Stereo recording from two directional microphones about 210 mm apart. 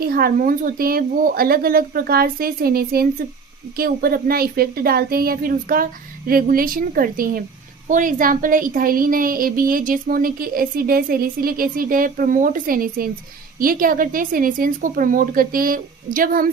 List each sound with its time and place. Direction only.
0.0 s a woman's voice: 45° right (ahead or behind)